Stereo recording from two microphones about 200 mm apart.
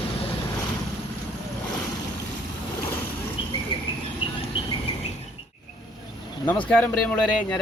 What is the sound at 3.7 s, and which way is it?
Vehicle, 25° left (ahead or behind).